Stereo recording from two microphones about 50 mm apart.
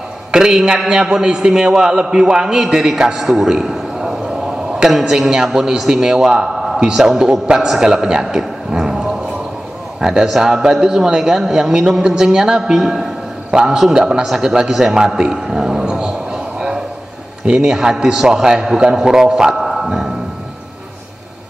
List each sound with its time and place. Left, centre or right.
0.3 s a man's voice: centre
14.3 s a sound: centre
17.6 s a man's voice: centre
19.6 s music: centre